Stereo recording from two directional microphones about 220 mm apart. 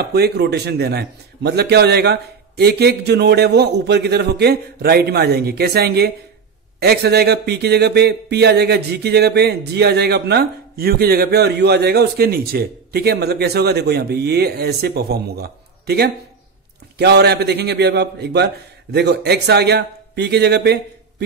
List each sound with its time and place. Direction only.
0.0 s speech: 45° right (ahead or behind)
17.0 s speech: 50° right (ahead or behind)